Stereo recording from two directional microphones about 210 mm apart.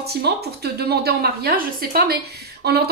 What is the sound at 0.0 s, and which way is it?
A woman's voice, 50° right (ahead or behind).